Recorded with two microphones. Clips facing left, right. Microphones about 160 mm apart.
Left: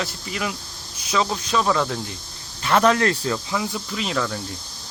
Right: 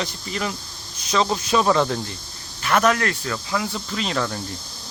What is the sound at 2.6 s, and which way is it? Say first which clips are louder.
Speech: left 2 dB; 25° left (ahead or behind).